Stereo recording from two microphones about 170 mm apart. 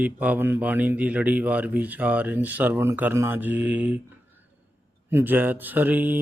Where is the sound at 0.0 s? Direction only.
10° right (ahead or behind).